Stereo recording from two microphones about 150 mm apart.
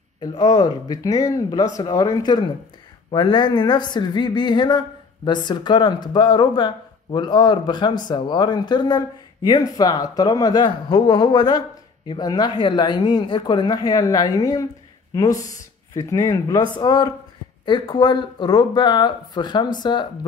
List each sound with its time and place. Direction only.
0.2 s a woman's voice: 25° left (ahead or behind)